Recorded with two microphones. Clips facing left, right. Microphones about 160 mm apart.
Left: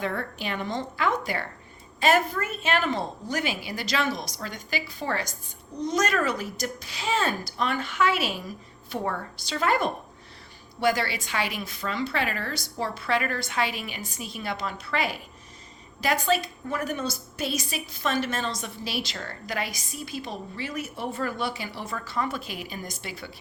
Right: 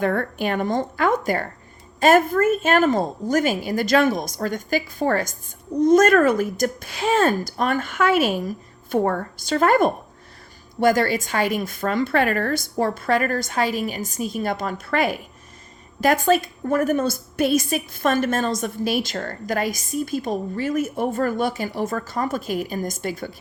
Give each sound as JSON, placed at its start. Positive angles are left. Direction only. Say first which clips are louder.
{"t": 0.0, "sound": "a woman's voice", "louder": "right 8 dB", "side_deg": -50}